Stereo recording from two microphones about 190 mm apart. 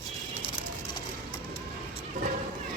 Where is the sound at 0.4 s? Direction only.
25° left (ahead or behind).